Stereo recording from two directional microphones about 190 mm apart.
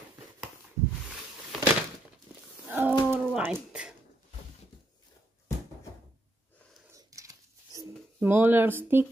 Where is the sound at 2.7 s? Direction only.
10° right (ahead or behind).